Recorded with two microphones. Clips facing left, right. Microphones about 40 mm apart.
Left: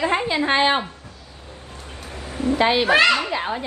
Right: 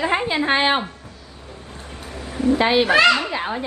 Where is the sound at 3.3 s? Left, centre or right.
Centre.